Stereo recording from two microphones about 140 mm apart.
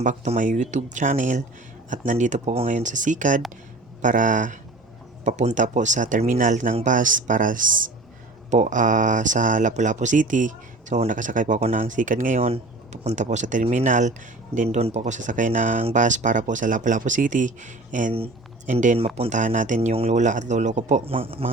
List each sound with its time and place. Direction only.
0.0 s speech: 65° right (ahead or behind)
8.4 s speech: 60° right (ahead or behind)
12.4 s speech: 50° right (ahead or behind)
14.8 s speech: 50° right (ahead or behind); by 15.8 s 70° right (ahead or behind)
15.8 s speech: 55° right (ahead or behind)
18.9 s speech: 45° right (ahead or behind)
19.3 s speech: 65° right (ahead or behind)
19.9 s speech: 50° right (ahead or behind)
21.1 s speech: 45° right (ahead or behind)